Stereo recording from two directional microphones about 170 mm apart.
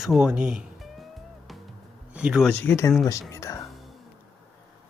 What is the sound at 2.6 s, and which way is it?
Speech, 15° left (ahead or behind).